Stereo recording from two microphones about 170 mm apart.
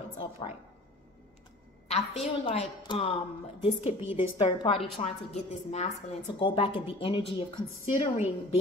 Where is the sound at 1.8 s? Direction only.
40° left (ahead or behind).